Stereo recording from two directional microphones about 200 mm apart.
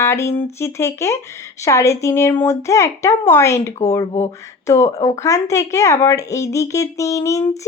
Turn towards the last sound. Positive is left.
turn(degrees=15)  # may be behind; listen again after turning